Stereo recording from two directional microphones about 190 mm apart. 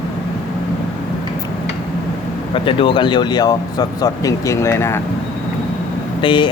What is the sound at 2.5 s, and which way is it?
Speech, 25° left (ahead or behind).